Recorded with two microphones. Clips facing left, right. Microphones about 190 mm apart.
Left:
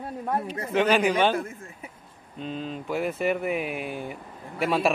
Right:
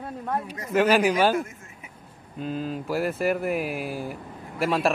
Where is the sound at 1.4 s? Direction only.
35° left (ahead or behind).